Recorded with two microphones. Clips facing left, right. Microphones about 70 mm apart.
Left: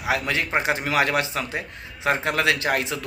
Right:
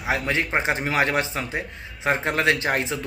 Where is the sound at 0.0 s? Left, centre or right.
Right.